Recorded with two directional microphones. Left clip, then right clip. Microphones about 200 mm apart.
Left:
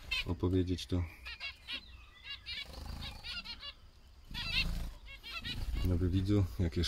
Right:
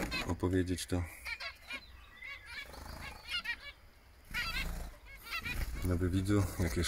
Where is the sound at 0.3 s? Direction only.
5° right (ahead or behind).